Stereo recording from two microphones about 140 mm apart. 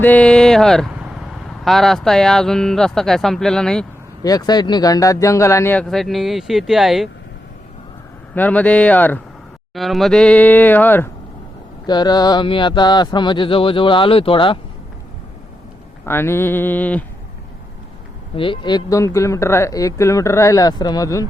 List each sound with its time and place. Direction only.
0.0 s speech: 10° left (ahead or behind)
4.2 s speech: 25° left (ahead or behind)
5.9 s speech: centre (ahead or behind)
8.4 s speech: 10° left (ahead or behind)
9.7 s speech: centre (ahead or behind)
11.9 s speech: 30° left (ahead or behind)
16.0 s speech: 15° left (ahead or behind)
18.3 s speech: 35° left (ahead or behind)